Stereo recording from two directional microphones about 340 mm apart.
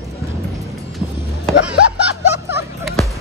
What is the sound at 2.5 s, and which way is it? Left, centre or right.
Music, centre.